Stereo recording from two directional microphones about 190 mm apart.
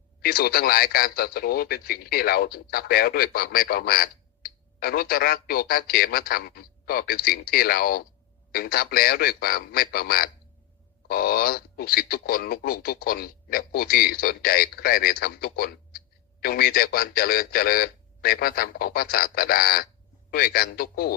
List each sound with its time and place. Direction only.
0.2 s speech: 50° left (ahead or behind)